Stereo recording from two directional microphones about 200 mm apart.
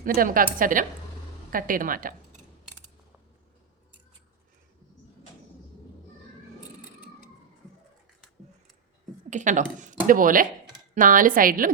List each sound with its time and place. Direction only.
0.0 s a woman's voice: 45° right (ahead or behind)
9.3 s a woman's voice: 40° right (ahead or behind)